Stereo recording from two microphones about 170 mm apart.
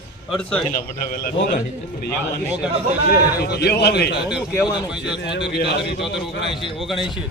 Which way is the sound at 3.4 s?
70° left (ahead or behind).